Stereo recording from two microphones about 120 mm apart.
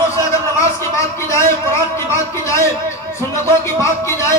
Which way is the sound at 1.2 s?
25° left (ahead or behind).